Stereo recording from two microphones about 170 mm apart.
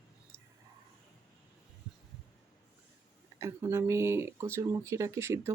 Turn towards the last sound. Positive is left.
turn(degrees=-15)  # may be behind; listen again after turning